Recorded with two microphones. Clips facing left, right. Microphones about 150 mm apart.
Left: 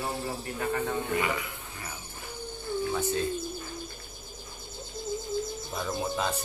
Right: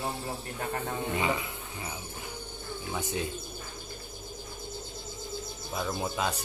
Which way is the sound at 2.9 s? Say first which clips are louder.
Left 2 dB; 15° right (ahead or behind).